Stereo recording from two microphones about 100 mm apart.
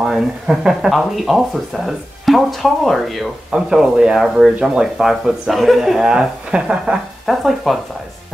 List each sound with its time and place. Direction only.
0.0 s speech: 5° right (ahead or behind)